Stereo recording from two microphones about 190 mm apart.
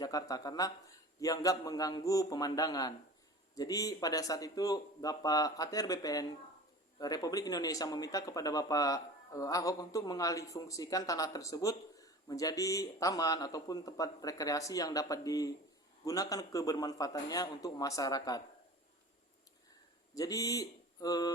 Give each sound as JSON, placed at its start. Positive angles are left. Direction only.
{"t": 0.0, "sound": "speech", "side_deg": 20}
{"t": 20.1, "sound": "speech", "side_deg": 20}